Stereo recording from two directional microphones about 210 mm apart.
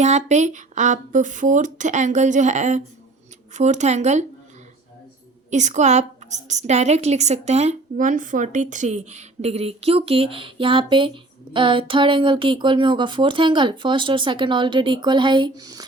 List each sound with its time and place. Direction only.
0.0 s speech: 35° right (ahead or behind)
5.5 s a woman's voice: 35° right (ahead or behind); by 15.8 s 15° right (ahead or behind)